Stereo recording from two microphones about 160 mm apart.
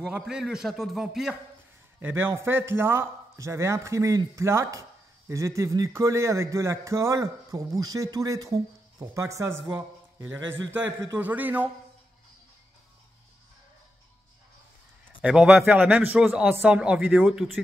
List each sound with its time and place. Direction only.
0.0 s a man's voice: 5° right (ahead or behind)
2.0 s a man's voice: 15° right (ahead or behind)
15.2 s a man's voice: 5° right (ahead or behind)